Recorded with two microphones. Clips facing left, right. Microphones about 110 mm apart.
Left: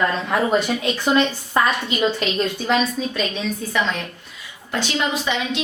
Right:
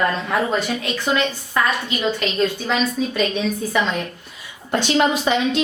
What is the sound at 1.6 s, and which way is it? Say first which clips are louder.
Speech: left 1 dB; 30° left (ahead or behind).